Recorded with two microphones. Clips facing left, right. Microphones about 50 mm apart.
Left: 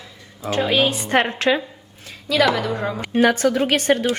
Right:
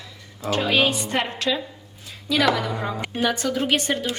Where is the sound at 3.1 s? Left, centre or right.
Left.